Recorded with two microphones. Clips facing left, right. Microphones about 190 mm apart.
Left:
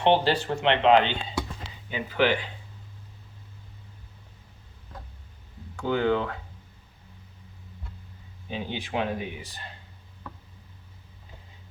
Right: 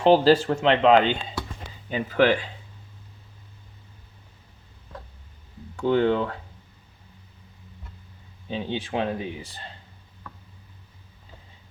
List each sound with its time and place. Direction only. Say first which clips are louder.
0.0 s speech: right 5 dB; 40° right (ahead or behind)
5.8 s speech: right 4 dB; 35° right (ahead or behind)
8.4 s speech: right 4 dB; 30° right (ahead or behind)